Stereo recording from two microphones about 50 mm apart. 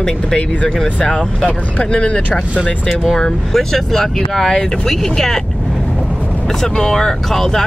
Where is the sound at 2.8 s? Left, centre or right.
Centre.